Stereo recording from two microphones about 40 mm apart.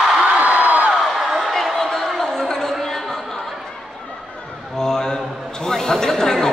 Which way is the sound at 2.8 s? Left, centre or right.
Centre.